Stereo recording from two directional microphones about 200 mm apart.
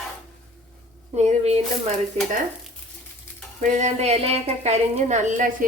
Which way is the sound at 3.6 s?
35° right (ahead or behind).